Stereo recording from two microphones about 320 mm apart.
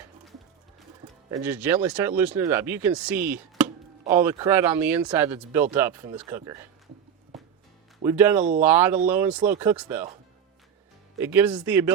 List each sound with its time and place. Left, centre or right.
1.3 s speech: centre
7.3 s music: centre
8.0 s speech: centre
8.4 s speech: right
8.6 s speech: centre
11.2 s speech: centre